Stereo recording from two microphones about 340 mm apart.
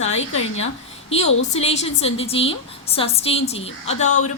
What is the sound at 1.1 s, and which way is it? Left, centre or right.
A woman's voice, centre.